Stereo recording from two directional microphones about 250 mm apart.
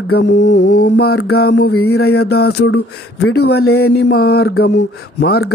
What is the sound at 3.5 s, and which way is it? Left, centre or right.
Mantra, left.